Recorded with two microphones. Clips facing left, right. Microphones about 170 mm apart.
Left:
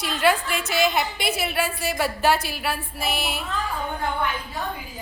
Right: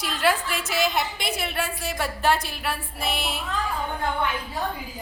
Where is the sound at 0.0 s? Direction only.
Centre (ahead or behind).